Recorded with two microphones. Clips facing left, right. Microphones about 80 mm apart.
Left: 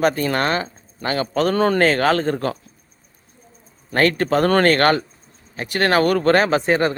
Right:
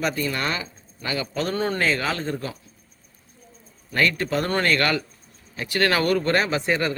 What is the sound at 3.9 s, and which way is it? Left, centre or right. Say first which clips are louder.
Speech: left 5 dB; left.